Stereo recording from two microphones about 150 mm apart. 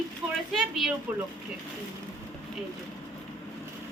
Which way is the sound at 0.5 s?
Centre (ahead or behind).